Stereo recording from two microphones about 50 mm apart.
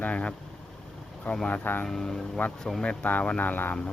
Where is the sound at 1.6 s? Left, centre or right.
Left.